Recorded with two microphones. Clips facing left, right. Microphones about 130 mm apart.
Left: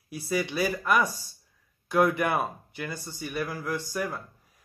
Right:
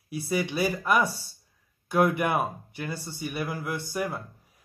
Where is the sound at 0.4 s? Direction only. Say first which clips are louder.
Even; 15° right (ahead or behind).